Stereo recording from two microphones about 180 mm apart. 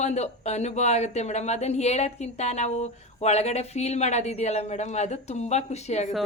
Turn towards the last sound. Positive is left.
turn(degrees=40)  # may be behind; listen again after turning